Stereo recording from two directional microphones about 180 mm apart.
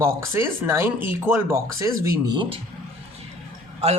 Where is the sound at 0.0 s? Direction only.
15° right (ahead or behind).